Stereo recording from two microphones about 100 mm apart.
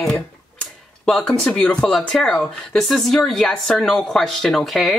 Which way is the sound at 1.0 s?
5° left (ahead or behind).